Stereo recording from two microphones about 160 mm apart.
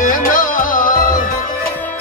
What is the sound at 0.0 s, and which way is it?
Music, 55° left (ahead or behind).